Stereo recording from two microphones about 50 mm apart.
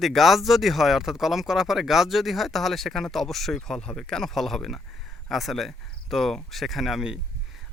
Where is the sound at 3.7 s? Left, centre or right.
Centre.